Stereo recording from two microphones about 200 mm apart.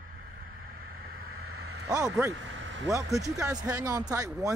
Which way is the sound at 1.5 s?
90° right.